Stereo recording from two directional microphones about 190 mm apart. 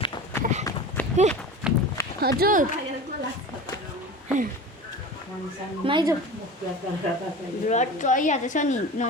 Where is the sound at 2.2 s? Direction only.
50° right (ahead or behind).